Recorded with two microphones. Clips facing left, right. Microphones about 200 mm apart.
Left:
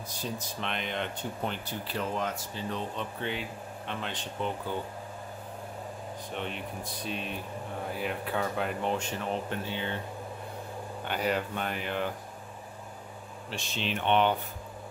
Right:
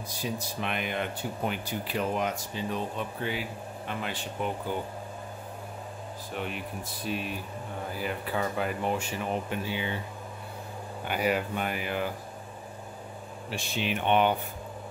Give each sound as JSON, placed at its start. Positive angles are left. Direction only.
{"t": 0.2, "sound": "speech", "side_deg": -10}
{"t": 6.3, "sound": "speech", "side_deg": -5}
{"t": 11.1, "sound": "speech", "side_deg": -10}
{"t": 13.5, "sound": "speech", "side_deg": -10}